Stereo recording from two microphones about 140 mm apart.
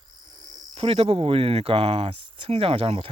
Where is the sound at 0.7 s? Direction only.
45° right (ahead or behind).